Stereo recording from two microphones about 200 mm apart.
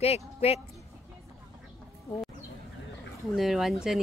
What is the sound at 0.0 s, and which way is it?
Speech, 30° left (ahead or behind).